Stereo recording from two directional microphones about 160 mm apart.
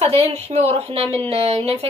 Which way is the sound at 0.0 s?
40° right (ahead or behind).